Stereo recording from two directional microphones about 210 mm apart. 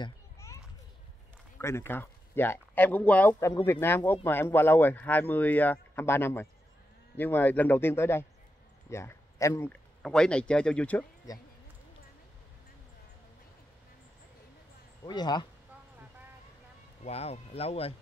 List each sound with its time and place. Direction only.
0.0 s children playing: 15° left (ahead or behind)
1.6 s speech: 10° left (ahead or behind)
15.0 s speech: 20° left (ahead or behind)
17.0 s speech: 30° left (ahead or behind)